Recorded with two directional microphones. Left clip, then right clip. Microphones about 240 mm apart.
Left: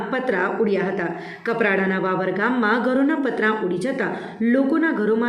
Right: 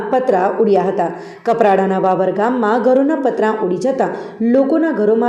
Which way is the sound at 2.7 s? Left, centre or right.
Centre.